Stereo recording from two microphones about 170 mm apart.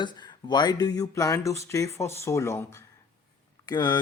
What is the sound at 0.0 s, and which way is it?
Speech, 25° left (ahead or behind).